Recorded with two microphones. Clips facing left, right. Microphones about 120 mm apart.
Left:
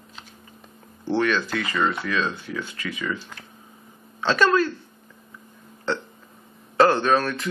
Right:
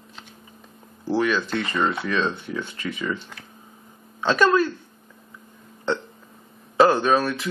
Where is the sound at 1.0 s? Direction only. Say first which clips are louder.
Even; 5° right (ahead or behind).